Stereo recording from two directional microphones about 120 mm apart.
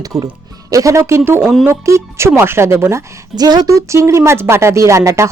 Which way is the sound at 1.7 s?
25° right (ahead or behind).